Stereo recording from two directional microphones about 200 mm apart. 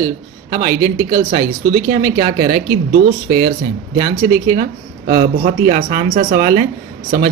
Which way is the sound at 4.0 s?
50° right (ahead or behind).